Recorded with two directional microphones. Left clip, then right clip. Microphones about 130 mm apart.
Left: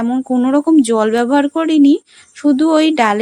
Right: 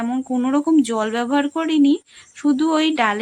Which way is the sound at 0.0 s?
25° left (ahead or behind).